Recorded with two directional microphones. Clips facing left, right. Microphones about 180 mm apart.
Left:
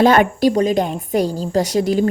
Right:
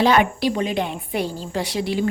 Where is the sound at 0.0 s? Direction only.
45° left (ahead or behind).